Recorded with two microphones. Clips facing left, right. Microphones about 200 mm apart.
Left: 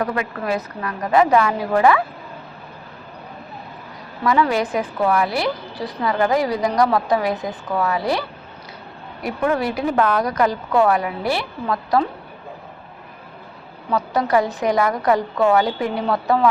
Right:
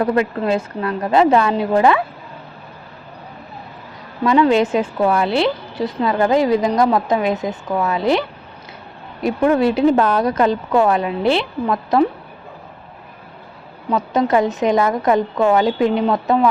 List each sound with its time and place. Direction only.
0.0 s a woman's voice: 30° right (ahead or behind)
4.2 s a woman's voice: 25° right (ahead or behind)
13.9 s a woman's voice: 20° right (ahead or behind)